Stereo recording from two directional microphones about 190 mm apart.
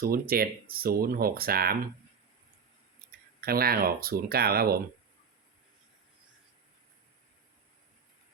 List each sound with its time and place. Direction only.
0.0 s speech: 50° right (ahead or behind)
3.0 s a sound: 50° right (ahead or behind)
3.4 s speech: 50° right (ahead or behind)